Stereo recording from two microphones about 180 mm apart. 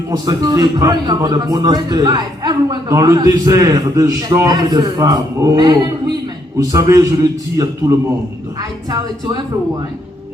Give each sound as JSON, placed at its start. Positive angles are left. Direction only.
{"t": 0.1, "sound": "a man's voice", "side_deg": -20}